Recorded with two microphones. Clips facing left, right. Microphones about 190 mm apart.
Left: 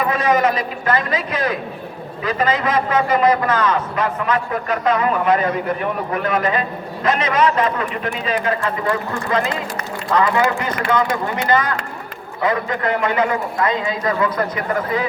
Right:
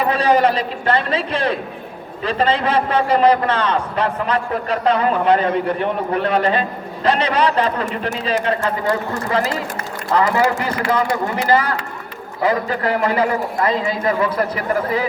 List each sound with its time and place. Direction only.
0.0 s a man's voice: 30° right (ahead or behind)